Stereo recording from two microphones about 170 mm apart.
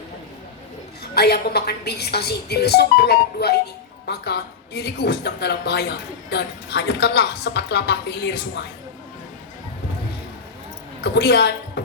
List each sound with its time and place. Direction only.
1.1 s a woman's voice: 70° left (ahead or behind)
11.0 s a woman's voice: 80° left